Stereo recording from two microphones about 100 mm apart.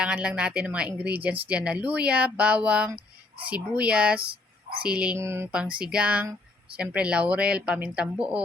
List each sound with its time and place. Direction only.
0.0 s speech: 10° right (ahead or behind)
5.1 s speech: 25° right (ahead or behind)
5.5 s speech: 10° right (ahead or behind)